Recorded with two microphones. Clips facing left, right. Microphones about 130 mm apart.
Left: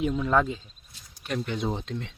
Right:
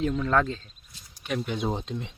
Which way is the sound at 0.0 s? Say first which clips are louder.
Even; 10° left (ahead or behind).